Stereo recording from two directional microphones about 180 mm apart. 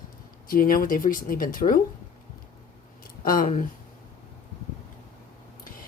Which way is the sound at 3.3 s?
50° left (ahead or behind).